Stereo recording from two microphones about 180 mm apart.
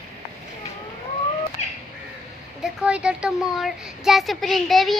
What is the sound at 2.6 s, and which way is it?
Speech, 5° right (ahead or behind).